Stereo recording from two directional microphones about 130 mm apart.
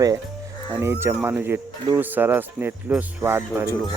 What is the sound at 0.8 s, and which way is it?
Speech, 15° right (ahead or behind).